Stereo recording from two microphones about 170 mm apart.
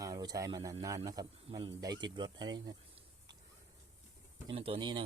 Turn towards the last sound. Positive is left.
turn(degrees=-30)  # may be behind; listen again after turning